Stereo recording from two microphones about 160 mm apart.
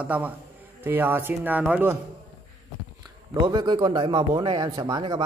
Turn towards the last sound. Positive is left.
turn(degrees=-25)  # may be behind; listen again after turning